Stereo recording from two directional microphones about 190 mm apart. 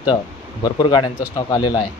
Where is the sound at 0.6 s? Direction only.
20° left (ahead or behind).